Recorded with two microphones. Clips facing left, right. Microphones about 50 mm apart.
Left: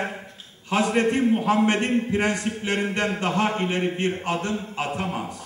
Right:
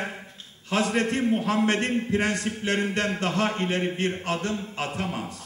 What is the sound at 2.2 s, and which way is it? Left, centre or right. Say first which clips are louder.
A man's voice: left 2 dB; centre.